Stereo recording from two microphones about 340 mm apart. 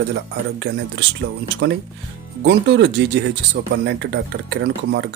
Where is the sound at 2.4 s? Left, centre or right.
Right.